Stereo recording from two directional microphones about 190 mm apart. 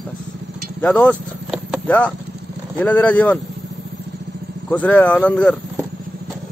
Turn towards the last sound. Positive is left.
turn(degrees=5)  # may be behind; listen again after turning